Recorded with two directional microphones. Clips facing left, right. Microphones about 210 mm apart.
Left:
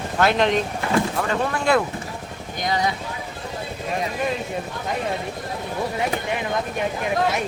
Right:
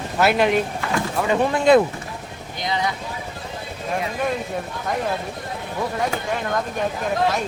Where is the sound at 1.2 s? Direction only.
15° right (ahead or behind).